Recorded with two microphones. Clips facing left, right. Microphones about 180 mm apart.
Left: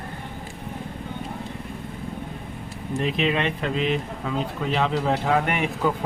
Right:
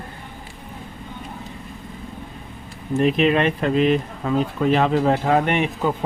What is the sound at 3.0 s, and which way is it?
Speech, 50° right (ahead or behind).